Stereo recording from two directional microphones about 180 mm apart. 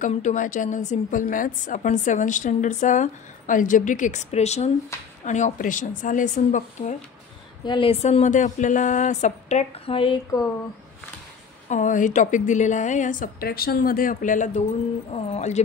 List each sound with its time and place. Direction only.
0.0 s a woman's voice: 40° left (ahead or behind)
7.6 s speech: 30° left (ahead or behind)
11.7 s a woman's voice: 45° left (ahead or behind)